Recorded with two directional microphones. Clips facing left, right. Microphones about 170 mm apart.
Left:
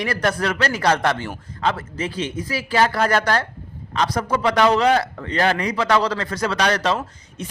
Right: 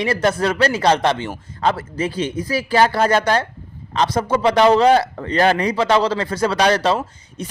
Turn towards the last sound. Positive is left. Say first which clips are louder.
# right 3 dB
turn(degrees=-30)  # may be behind; listen again after turning